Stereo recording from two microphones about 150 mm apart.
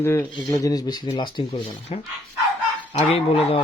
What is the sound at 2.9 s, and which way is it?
Speech, 40° left (ahead or behind).